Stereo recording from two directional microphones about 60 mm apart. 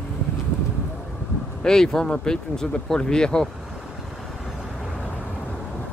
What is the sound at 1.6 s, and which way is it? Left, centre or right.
Speech, centre.